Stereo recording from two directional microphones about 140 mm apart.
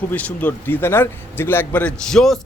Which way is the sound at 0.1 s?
10° left (ahead or behind).